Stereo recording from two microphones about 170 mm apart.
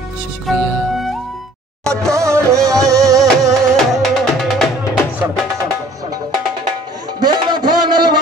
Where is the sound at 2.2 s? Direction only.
20° right (ahead or behind).